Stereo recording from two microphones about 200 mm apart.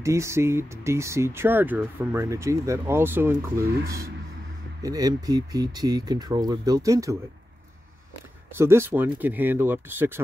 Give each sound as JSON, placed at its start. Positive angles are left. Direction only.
{"t": 0.0, "sound": "speech", "side_deg": -15}
{"t": 4.8, "sound": "speech", "side_deg": -20}
{"t": 8.5, "sound": "speech", "side_deg": -10}